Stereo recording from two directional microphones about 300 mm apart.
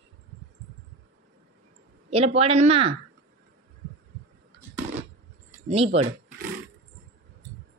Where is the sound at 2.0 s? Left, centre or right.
Centre.